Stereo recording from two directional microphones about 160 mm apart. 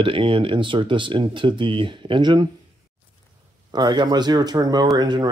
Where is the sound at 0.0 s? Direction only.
35° right (ahead or behind).